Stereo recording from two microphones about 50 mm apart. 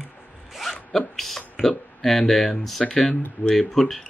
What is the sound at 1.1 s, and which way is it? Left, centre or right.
Speech, centre.